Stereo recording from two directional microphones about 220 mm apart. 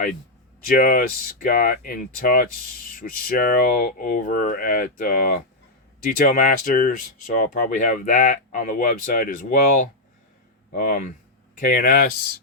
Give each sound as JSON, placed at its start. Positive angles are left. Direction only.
{"t": 0.7, "sound": "speech", "side_deg": 40}